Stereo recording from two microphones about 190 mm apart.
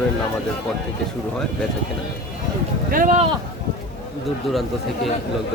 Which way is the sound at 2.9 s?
45° right (ahead or behind).